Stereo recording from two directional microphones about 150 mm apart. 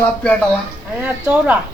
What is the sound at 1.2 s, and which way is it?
Speech, 10° right (ahead or behind).